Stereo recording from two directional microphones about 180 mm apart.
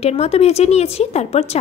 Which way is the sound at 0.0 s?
35° left (ahead or behind).